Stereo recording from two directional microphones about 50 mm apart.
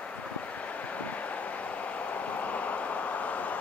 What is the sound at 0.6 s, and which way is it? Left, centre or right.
Vehicle, left.